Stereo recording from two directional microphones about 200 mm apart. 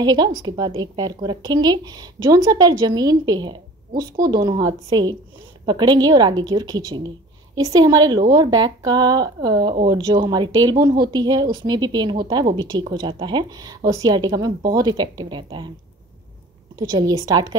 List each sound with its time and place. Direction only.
0.0 s a woman's voice: 20° right (ahead or behind)
16.7 s a woman's voice: 20° right (ahead or behind)